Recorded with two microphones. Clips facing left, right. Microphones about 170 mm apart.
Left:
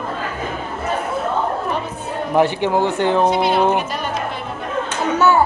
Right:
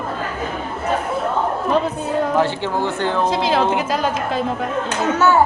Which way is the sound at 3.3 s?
90° right.